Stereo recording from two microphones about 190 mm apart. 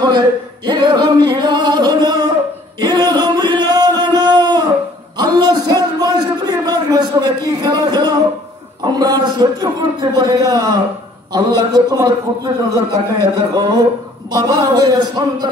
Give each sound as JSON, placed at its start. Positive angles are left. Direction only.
{"t": 0.0, "sound": "singing", "side_deg": -25}
{"t": 2.8, "sound": "a sound", "side_deg": -20}
{"t": 7.7, "sound": "singing", "side_deg": -20}